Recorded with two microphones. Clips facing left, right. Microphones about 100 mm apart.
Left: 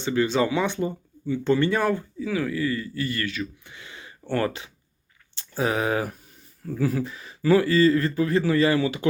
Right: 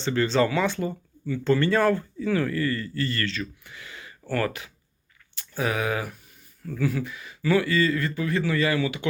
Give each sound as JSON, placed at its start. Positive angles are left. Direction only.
{"t": 0.0, "sound": "speech", "side_deg": 10}
{"t": 2.2, "sound": "speech", "side_deg": 5}